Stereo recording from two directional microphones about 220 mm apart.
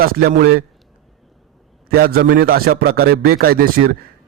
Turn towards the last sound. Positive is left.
turn(degrees=-40)  # may be behind; listen again after turning